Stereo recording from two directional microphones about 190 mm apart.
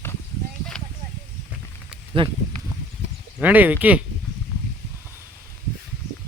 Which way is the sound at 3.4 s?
10° right (ahead or behind).